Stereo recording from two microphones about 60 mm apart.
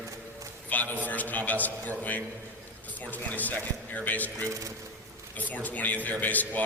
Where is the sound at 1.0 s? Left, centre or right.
Left.